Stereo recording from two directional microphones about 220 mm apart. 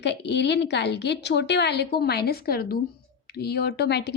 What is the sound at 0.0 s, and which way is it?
A woman's voice, 50° left (ahead or behind).